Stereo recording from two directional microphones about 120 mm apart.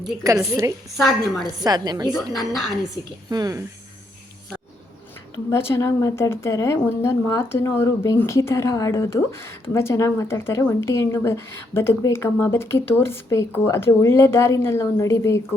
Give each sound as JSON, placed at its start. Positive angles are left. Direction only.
{"t": 0.2, "sound": "a woman's voice", "side_deg": -30}
{"t": 0.9, "sound": "a woman's voice", "side_deg": 0}
{"t": 1.6, "sound": "a woman's voice", "side_deg": -35}
{"t": 2.3, "sound": "a woman's voice", "side_deg": 0}
{"t": 3.2, "sound": "a woman's voice", "side_deg": -35}
{"t": 5.5, "sound": "speech", "side_deg": 20}